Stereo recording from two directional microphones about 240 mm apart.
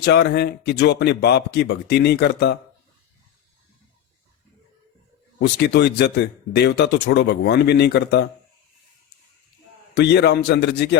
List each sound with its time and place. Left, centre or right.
0.0 s speech: left
5.4 s speech: left
9.9 s speech: left